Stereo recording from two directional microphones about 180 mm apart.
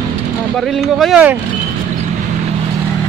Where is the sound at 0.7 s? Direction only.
Centre (ahead or behind).